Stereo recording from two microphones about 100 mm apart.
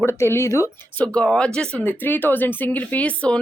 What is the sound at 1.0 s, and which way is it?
A woman's voice, 10° left (ahead or behind).